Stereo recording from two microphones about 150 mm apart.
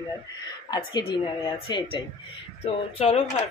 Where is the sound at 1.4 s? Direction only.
30° left (ahead or behind).